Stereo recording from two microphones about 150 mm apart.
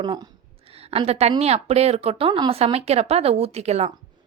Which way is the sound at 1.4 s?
45° right (ahead or behind).